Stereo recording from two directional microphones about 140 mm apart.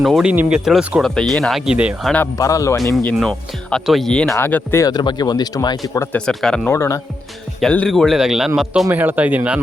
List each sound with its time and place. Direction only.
0.0 s speech: 5° right (ahead or behind)
2.0 s speech: 10° left (ahead or behind)
2.4 s speech: 20° left (ahead or behind)
3.0 s speech: 5° left (ahead or behind)
4.4 s speech: 15° left (ahead or behind)
4.9 s speech: 30° left (ahead or behind)
6.1 s speech: 5° left (ahead or behind)
6.7 s speech: 20° left (ahead or behind)
7.6 s speech: 5° left (ahead or behind); by 9.6 s 10° right (ahead or behind)